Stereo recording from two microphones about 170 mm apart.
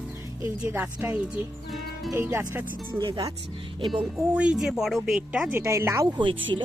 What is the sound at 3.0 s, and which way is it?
Speech, 30° right (ahead or behind).